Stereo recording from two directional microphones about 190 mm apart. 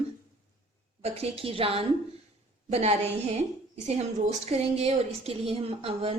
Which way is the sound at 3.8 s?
35° right (ahead or behind).